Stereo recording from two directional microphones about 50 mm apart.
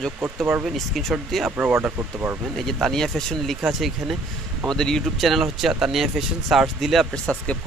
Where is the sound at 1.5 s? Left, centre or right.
Right.